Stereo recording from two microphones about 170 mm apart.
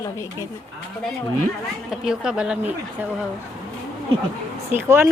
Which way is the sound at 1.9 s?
5° right (ahead or behind).